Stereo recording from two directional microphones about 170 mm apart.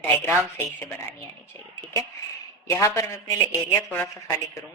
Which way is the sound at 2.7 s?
15° left (ahead or behind).